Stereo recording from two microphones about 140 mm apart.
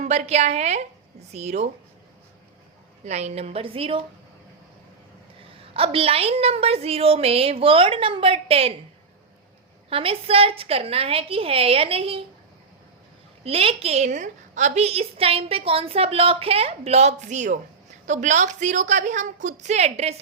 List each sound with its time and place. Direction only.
0.0 s a woman's voice: 55° right (ahead or behind)
3.0 s a woman's voice: 50° right (ahead or behind)
5.4 s a woman's voice: 40° right (ahead or behind)
9.9 s a woman's voice: 40° right (ahead or behind)
13.4 s a woman's voice: 45° right (ahead or behind)